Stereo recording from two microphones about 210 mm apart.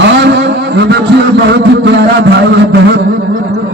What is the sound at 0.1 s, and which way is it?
Vehicle, 55° right (ahead or behind).